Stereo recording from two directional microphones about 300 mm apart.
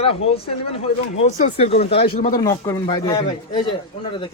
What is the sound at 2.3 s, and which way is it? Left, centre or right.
A man's voice, centre.